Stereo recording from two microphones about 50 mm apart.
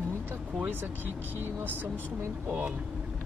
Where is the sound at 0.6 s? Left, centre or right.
Right.